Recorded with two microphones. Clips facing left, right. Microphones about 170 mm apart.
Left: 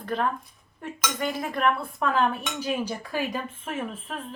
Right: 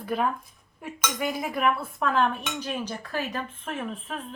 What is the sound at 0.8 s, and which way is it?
Cutlery, 10° right (ahead or behind).